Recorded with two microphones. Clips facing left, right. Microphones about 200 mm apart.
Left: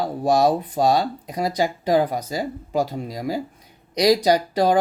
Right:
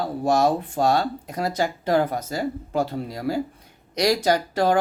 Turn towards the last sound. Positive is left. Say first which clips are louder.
# left 2 dB
turn(degrees=15)  # may be behind; listen again after turning